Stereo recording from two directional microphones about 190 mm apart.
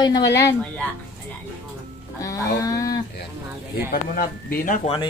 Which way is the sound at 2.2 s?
20° left (ahead or behind).